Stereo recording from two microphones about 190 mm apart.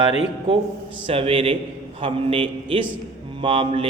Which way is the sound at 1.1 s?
30° right (ahead or behind).